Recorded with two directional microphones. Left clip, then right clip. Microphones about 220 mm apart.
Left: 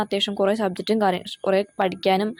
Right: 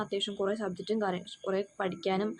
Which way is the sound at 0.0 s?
30° left (ahead or behind).